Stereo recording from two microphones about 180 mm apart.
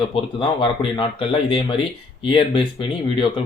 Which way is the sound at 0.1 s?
30° left (ahead or behind).